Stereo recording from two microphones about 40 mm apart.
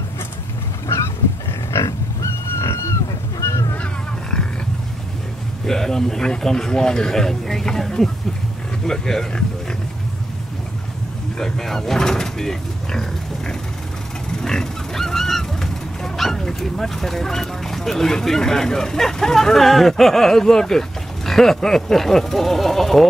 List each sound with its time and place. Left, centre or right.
1.7 s pig: left
5.7 s speech: centre
11.3 s speech: centre
14.4 s honk: centre
21.3 s speech: centre